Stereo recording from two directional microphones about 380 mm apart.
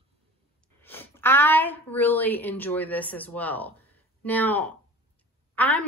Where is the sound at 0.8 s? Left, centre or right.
Centre.